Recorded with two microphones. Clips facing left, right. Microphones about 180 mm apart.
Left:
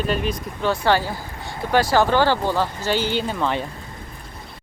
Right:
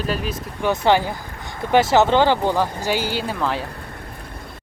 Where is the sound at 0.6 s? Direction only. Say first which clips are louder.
Right 2 dB; 15° right (ahead or behind).